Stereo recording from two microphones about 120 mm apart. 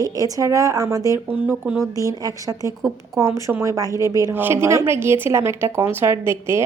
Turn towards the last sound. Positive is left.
turn(degrees=-20)  # may be behind; listen again after turning